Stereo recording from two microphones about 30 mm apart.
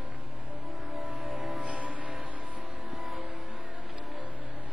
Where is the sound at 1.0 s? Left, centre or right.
Right.